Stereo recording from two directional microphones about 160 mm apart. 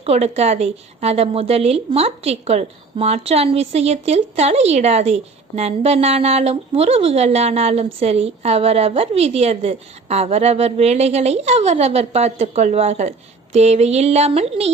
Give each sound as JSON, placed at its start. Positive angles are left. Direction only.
{"t": 0.0, "sound": "a woman's voice", "side_deg": -40}